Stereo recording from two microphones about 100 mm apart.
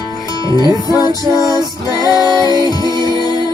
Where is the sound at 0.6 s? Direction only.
40° left (ahead or behind).